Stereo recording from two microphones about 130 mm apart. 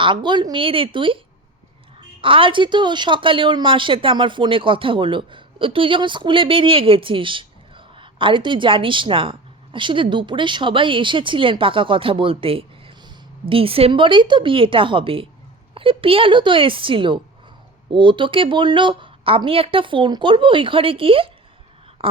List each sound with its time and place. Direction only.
0.0 s a woman's voice: 40° right (ahead or behind)